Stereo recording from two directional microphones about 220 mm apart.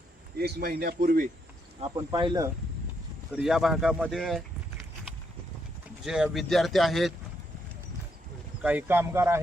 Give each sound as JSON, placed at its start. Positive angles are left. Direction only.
{"t": 0.3, "sound": "speech", "side_deg": -45}
{"t": 2.0, "sound": "speech", "side_deg": -20}
{"t": 3.3, "sound": "speech", "side_deg": 0}
{"t": 6.1, "sound": "speech", "side_deg": -5}
{"t": 8.6, "sound": "speech", "side_deg": -10}